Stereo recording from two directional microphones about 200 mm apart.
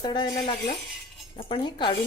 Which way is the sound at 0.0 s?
20° left (ahead or behind).